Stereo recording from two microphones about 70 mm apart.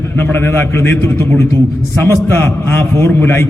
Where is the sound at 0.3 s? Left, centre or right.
Left.